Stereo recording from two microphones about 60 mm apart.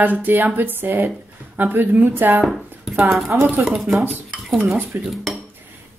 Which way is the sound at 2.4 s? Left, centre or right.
Centre.